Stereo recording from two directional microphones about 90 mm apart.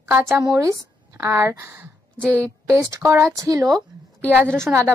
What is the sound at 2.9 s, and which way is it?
Speech, 35° right (ahead or behind).